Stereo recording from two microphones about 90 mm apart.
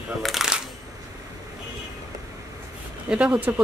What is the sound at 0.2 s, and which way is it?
Speech, 5° right (ahead or behind).